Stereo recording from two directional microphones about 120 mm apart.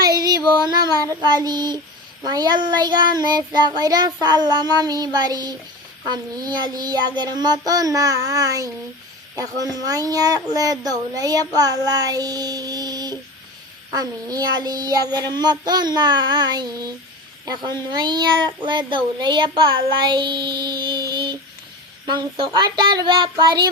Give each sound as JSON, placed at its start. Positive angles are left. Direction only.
{"t": 0.0, "sound": "child singing", "side_deg": -35}
{"t": 2.2, "sound": "a child's voice", "side_deg": -35}